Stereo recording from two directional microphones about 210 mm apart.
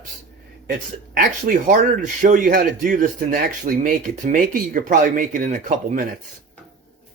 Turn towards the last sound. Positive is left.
turn(degrees=-35)  # may be behind; listen again after turning